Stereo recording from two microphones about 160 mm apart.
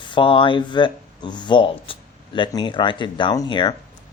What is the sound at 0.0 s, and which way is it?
Speech, 30° left (ahead or behind).